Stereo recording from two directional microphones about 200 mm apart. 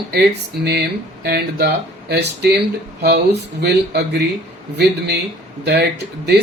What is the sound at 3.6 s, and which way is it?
Speech, 55° right (ahead or behind).